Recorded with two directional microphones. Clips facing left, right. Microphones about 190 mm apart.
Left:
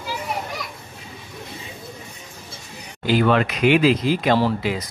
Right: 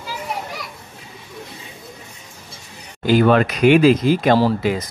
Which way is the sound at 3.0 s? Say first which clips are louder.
Right 4 dB; 45° right (ahead or behind).